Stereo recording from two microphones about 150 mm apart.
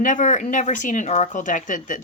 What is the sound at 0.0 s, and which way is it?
Speech, 60° left (ahead or behind).